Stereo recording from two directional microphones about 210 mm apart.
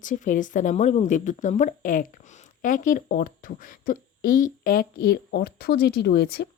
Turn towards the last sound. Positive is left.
turn(degrees=50)  # may be behind; listen again after turning